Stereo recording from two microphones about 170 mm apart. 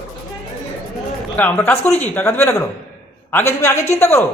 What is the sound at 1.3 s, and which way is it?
A man's voice, 10° left (ahead or behind).